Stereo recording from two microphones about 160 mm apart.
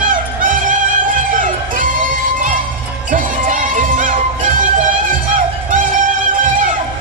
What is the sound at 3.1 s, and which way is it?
Music, 55° right (ahead or behind).